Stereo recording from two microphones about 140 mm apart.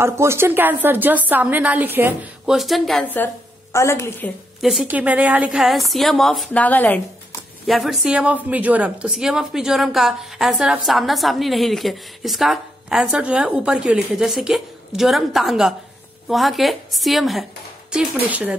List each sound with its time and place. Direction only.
0.0 s a woman's voice: 20° right (ahead or behind)
2.5 s speech: centre (ahead or behind)
3.7 s a woman's voice: 20° left (ahead or behind)
4.6 s a woman's voice: centre (ahead or behind)
7.6 s a woman's voice: centre (ahead or behind)